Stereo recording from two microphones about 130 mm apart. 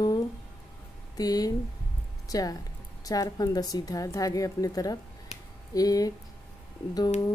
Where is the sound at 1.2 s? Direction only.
30° left (ahead or behind).